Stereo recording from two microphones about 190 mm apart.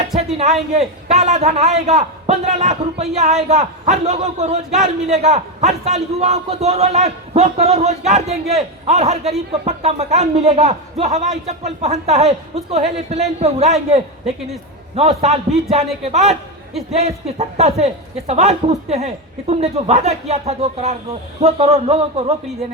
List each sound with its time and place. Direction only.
0.7 s speech: 35° right (ahead or behind)
14.9 s speech: 35° right (ahead or behind)